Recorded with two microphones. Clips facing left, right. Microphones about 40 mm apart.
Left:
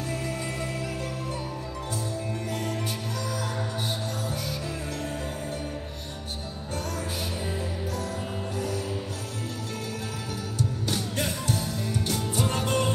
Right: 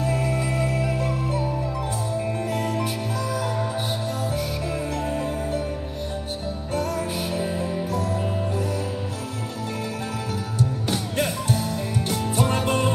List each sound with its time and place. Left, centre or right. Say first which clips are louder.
0.0 s music: right 7 dB; centre
6.7 s music: right 7 dB; centre
10.9 s music: right 4 dB; centre